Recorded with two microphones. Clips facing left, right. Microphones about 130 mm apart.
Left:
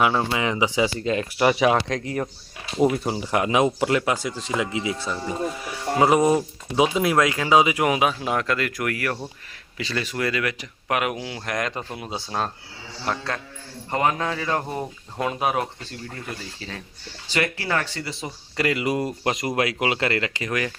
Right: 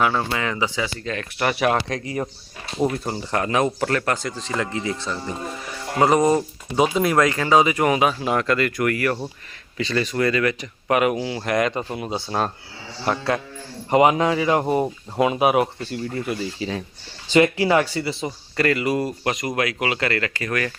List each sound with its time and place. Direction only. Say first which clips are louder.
0.0 s speech: even; 15° left (ahead or behind)
1.4 s speech: left 1 dB; 5° left (ahead or behind)
18.5 s speech: right 2 dB; 15° left (ahead or behind)